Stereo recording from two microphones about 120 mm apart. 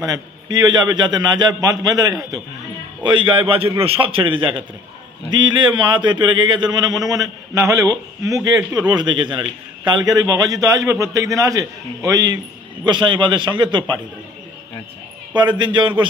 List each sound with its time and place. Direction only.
0.0 s a man's voice: 35° right (ahead or behind)
3.0 s a man's voice: 45° right (ahead or behind)
15.3 s a man's voice: 40° right (ahead or behind)